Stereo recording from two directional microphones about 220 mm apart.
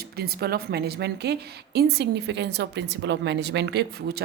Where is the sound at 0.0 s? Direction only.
45° right (ahead or behind).